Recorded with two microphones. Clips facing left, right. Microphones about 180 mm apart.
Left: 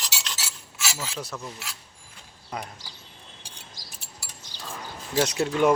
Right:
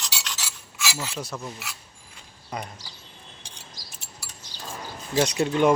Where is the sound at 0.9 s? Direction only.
Centre (ahead or behind).